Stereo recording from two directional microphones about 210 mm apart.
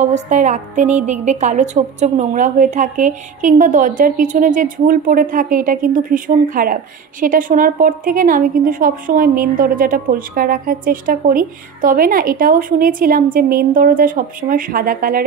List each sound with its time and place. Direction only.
0.1 s a woman's voice: 35° right (ahead or behind)